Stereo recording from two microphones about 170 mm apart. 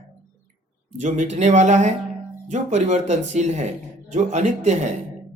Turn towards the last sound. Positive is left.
turn(degrees=-45)  # may be behind; listen again after turning